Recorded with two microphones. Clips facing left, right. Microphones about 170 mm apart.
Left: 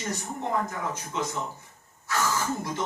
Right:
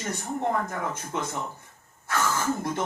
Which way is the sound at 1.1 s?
55° right (ahead or behind).